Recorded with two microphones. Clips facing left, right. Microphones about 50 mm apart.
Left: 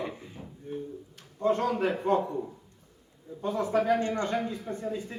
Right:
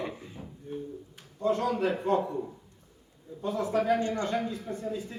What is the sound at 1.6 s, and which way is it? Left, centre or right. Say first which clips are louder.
A man's voice: left 1 dB; centre.